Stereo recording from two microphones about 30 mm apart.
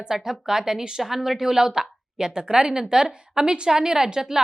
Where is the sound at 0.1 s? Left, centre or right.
Centre.